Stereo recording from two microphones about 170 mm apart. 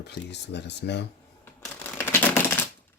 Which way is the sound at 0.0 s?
80° left.